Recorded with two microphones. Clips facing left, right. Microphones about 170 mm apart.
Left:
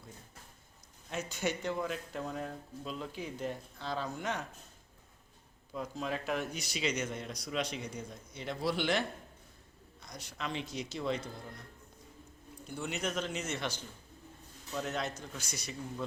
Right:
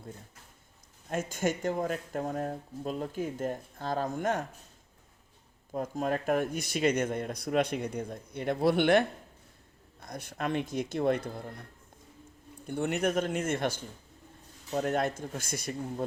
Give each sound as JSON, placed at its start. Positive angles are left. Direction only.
{"t": 1.1, "sound": "speech", "side_deg": -50}
{"t": 5.7, "sound": "speech", "side_deg": -50}
{"t": 12.6, "sound": "speech", "side_deg": -55}